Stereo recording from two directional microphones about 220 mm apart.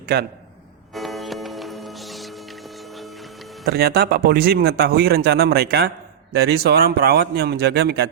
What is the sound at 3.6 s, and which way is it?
A man's voice, 45° right (ahead or behind).